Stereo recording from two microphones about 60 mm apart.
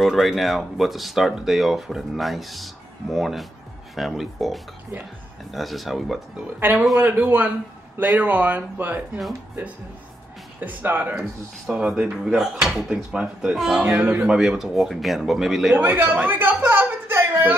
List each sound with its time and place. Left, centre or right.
0.0 s speech: centre
6.6 s speech: right
10.6 s speech: right
11.7 s speech: centre
12.9 s speech: centre
15.7 s speech: right
16.3 s a sound: right